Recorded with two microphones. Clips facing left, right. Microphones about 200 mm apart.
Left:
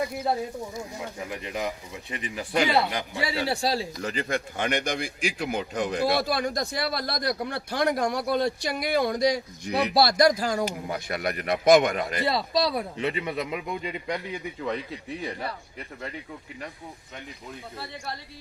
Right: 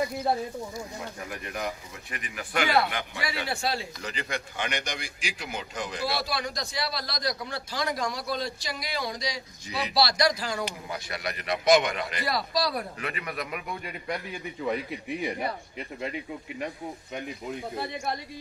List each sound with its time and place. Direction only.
0.0 s speech: centre (ahead or behind)
1.3 s a man's voice: 15° left (ahead or behind)
2.9 s a man's voice: 30° left (ahead or behind)
4.0 s a man's voice: 50° left (ahead or behind)
12.3 s a man's voice: 25° left (ahead or behind)
14.6 s speech: 15° right (ahead or behind)